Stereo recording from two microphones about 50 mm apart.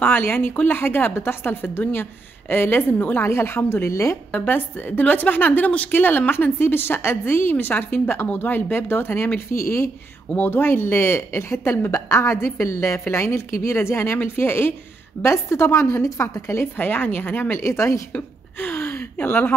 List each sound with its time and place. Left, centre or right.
0.0 s a woman's voice: left
4.4 s a woman's voice: left
7.5 s a woman's voice: left
10.4 s a woman's voice: left
14.1 s speech: left
15.2 s a woman's voice: left
16.7 s a woman's voice: left
17.6 s a woman's voice: left
18.1 s speech: left